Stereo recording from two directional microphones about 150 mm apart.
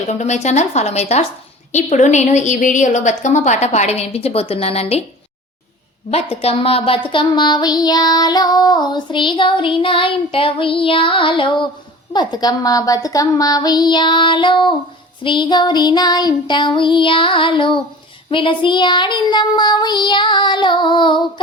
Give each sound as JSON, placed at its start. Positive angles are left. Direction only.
{"t": 0.1, "sound": "a woman's voice", "side_deg": 50}
{"t": 6.4, "sound": "child singing", "side_deg": 40}